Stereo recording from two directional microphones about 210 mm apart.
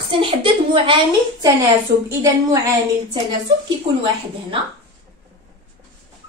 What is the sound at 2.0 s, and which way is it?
Speech, 15° right (ahead or behind).